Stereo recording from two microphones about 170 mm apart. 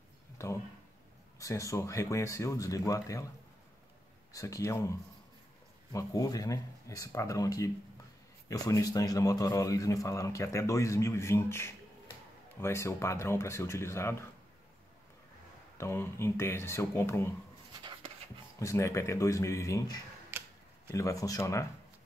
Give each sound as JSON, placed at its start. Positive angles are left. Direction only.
{"t": 0.4, "sound": "speech", "side_deg": 20}
{"t": 4.3, "sound": "speech", "side_deg": 20}
{"t": 5.9, "sound": "a man's voice", "side_deg": 20}
{"t": 15.8, "sound": "a man's voice", "side_deg": 15}
{"t": 18.6, "sound": "a man's voice", "side_deg": 20}
{"t": 20.2, "sound": "tick-tock", "side_deg": -15}
{"t": 20.9, "sound": "speech", "side_deg": 20}